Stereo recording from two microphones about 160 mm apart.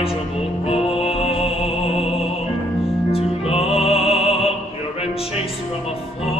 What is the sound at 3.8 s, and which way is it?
Opera, 35° left (ahead or behind).